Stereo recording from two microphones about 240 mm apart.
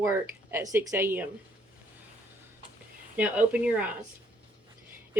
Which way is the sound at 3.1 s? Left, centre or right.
Centre.